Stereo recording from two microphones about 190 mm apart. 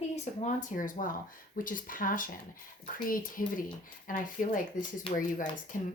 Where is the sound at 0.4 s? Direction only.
45° left (ahead or behind).